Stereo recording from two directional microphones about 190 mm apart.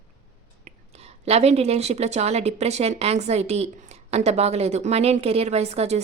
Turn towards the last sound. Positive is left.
turn(degrees=-35)  # may be behind; listen again after turning